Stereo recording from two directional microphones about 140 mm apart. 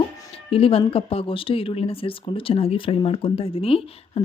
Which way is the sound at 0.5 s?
40° left (ahead or behind).